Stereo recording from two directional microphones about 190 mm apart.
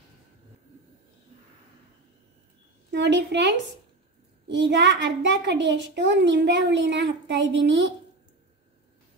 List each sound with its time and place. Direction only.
2.9 s a woman's voice: 65° right (ahead or behind)